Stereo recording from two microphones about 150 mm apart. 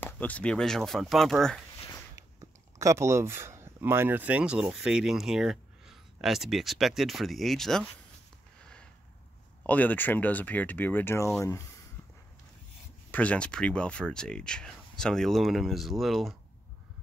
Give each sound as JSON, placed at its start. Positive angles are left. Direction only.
{"t": 0.0, "sound": "speech", "side_deg": 10}
{"t": 2.8, "sound": "speech", "side_deg": -20}
{"t": 9.6, "sound": "speech", "side_deg": 10}
{"t": 13.1, "sound": "speech", "side_deg": 10}